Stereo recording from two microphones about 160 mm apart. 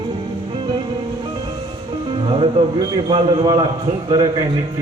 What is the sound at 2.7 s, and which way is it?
A man's voice, 30° right (ahead or behind).